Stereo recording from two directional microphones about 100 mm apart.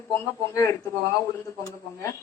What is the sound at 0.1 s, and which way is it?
Speech, 30° left (ahead or behind).